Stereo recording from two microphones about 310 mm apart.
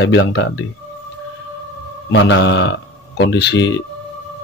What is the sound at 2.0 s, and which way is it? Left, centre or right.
Speech, left.